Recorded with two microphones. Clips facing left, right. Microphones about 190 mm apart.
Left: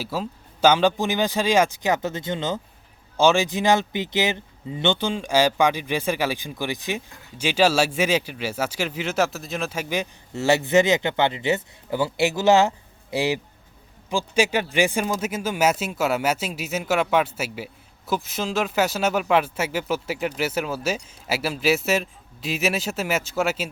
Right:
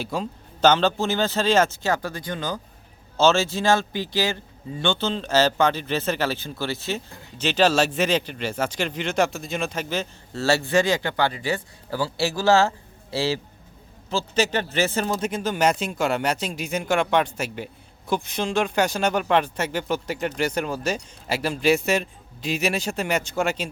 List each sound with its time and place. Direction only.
0.0 s speech: 5° left (ahead or behind)